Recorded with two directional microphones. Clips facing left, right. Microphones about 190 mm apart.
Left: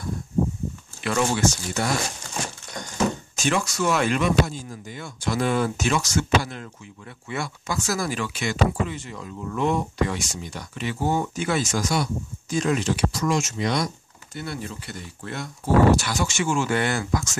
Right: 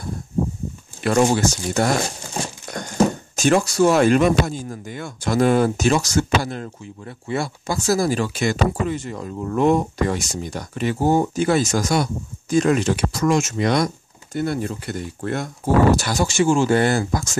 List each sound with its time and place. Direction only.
1.0 s speech: 40° right (ahead or behind)
3.3 s speech: 40° right (ahead or behind)